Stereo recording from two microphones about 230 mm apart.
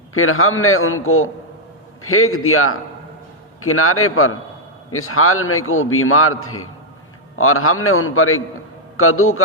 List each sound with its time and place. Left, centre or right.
0.1 s a man's voice: left